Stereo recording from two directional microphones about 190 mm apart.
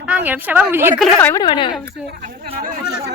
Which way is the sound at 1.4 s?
25° left (ahead or behind).